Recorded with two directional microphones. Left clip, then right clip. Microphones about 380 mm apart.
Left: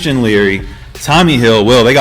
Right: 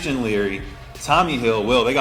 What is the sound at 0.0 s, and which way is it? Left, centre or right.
Speech, left.